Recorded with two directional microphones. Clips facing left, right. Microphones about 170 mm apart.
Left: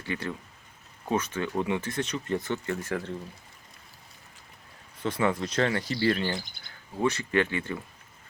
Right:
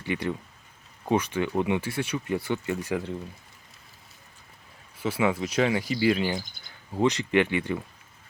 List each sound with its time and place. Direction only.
0.0 s speech: 15° right (ahead or behind)
4.9 s speech: 5° right (ahead or behind)